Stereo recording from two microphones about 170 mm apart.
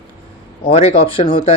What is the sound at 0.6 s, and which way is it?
Speech, 40° left (ahead or behind).